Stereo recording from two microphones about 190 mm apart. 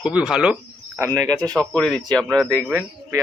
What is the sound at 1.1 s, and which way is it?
Speech, 20° right (ahead or behind).